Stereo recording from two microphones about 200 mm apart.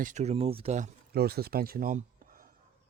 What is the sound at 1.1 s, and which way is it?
Speech, 50° right (ahead or behind).